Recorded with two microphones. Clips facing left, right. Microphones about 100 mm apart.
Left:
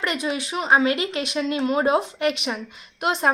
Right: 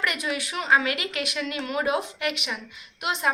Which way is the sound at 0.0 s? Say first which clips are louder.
Left 3 dB; 30° left (ahead or behind).